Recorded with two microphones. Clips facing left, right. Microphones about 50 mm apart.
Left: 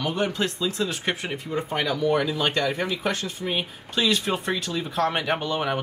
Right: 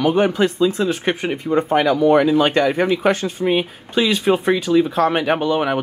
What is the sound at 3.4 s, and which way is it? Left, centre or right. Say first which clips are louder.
Speech: right 12 dB; right.